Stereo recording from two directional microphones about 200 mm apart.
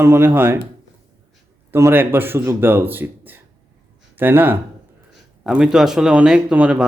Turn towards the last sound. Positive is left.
turn(degrees=-5)  # may be behind; listen again after turning